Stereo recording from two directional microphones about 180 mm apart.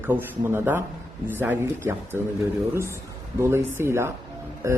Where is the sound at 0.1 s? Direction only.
10° right (ahead or behind).